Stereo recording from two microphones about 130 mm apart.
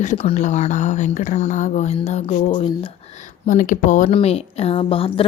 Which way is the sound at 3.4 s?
85° left.